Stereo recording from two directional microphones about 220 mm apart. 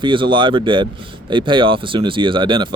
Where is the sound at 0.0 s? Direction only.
20° right (ahead or behind).